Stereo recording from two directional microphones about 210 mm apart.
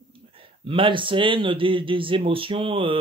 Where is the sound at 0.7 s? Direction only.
25° right (ahead or behind).